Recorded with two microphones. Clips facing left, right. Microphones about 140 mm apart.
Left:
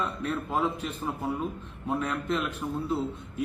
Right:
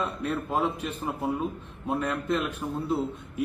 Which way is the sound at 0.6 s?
75° right (ahead or behind).